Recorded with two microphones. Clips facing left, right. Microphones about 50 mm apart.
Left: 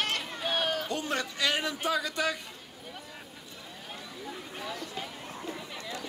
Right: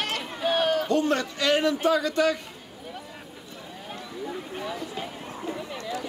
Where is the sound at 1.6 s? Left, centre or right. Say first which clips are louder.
Right 8 dB; centre.